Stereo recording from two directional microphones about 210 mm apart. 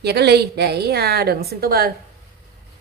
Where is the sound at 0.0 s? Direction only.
50° right (ahead or behind).